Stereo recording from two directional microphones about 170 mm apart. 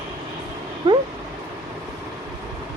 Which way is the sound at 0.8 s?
35° right (ahead or behind).